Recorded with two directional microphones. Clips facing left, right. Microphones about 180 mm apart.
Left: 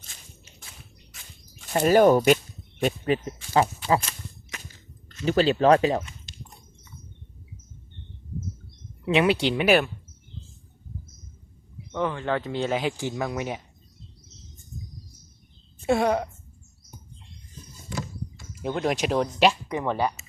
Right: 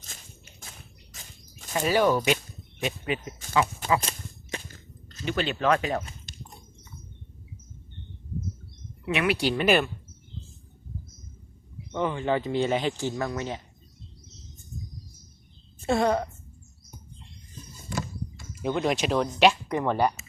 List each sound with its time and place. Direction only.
0.0 s biting: 45° right (ahead or behind)
1.7 s speech: 45° left (ahead or behind)
2.8 s speech: 40° left (ahead or behind)
4.0 s whip: 35° right (ahead or behind)
4.7 s chewing: 35° right (ahead or behind)
5.2 s speech: 35° left (ahead or behind)
6.3 s a sound: 50° right (ahead or behind)
9.0 s speech: 30° left (ahead or behind)
9.6 s speech: 5° left (ahead or behind)
11.9 s speech: 5° right (ahead or behind)
13.0 s speech: 10° left (ahead or behind)
15.8 s speech: 10° left (ahead or behind)
18.6 s speech: centre (ahead or behind)